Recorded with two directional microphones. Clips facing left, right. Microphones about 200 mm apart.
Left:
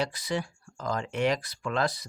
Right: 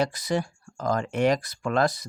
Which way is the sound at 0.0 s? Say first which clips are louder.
Right 5 dB; 45° right (ahead or behind).